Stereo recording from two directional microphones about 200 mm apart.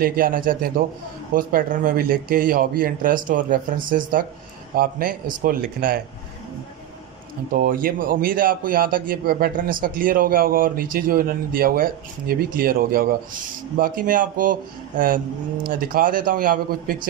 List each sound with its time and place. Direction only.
0.0 s a man's voice: 45° right (ahead or behind)
7.5 s a man's voice: 45° right (ahead or behind)